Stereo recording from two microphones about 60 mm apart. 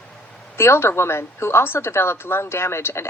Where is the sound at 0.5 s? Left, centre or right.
Left.